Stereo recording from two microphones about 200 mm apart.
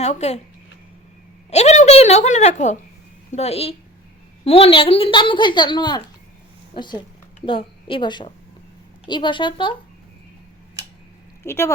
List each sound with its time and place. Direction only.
0.0 s speech: 35° left (ahead or behind)
1.5 s a woman's voice: 35° left (ahead or behind)
11.4 s speech: 15° left (ahead or behind)